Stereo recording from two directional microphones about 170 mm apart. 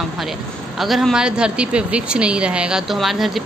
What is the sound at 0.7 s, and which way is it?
Speech, centre (ahead or behind).